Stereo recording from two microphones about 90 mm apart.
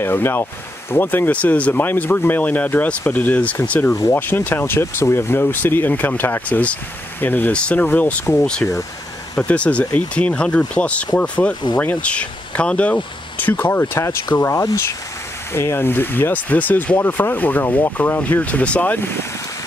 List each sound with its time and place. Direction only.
0.0 s speech: 25° left (ahead or behind)
3.9 s speech: 30° left (ahead or behind)
15.5 s speech: 25° left (ahead or behind)